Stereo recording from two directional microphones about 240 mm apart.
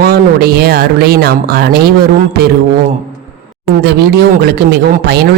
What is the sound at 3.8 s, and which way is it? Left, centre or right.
Speech, right.